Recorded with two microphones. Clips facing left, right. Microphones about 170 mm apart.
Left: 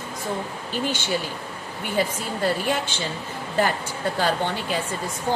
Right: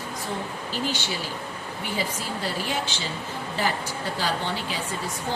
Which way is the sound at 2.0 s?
55° left (ahead or behind).